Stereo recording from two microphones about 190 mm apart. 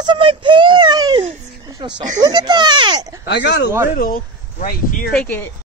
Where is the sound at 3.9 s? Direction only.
50° left (ahead or behind).